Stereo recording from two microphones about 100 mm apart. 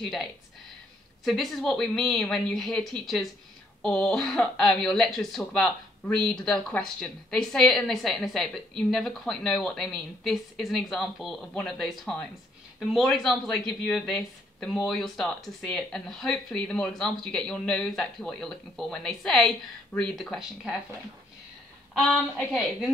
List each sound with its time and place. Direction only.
0.0 s speech: 5° left (ahead or behind)
21.9 s speech: centre (ahead or behind)